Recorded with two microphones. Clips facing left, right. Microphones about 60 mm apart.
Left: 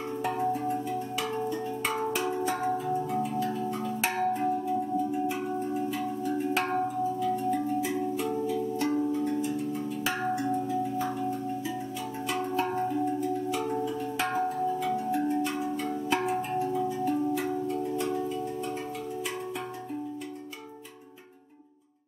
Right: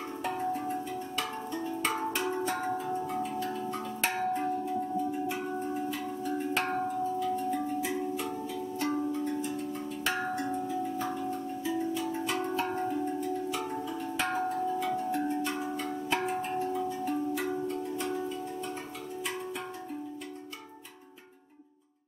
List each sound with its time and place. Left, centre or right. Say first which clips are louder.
0.2 s music: left 3 dB; centre
2.9 s tubular bells: left 3 dB; centre
5.3 s singing bowl: left 3 dB; centre
12.3 s music: left 6 dB; centre
17.9 s singing bowl: left 4 dB; centre